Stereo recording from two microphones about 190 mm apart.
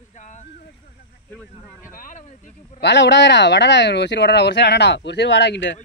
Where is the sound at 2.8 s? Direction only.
65° left (ahead or behind).